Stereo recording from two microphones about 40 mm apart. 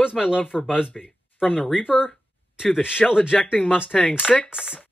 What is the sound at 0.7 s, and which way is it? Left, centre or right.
Speech, centre.